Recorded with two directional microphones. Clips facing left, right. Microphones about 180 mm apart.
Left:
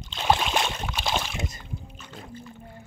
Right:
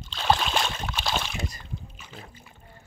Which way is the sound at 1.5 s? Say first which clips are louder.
Left 1 dB; 5° right (ahead or behind).